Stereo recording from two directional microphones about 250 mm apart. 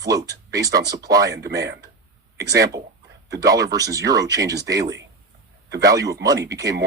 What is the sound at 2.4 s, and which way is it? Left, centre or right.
Speech, right.